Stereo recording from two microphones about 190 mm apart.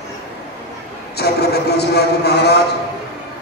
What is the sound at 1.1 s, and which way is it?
A man's voice, 55° left (ahead or behind).